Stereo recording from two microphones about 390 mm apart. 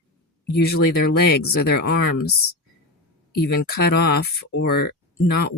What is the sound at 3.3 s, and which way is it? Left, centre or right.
Speech, left.